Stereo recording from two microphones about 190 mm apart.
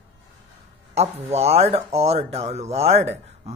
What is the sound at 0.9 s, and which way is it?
Speech, 35° right (ahead or behind).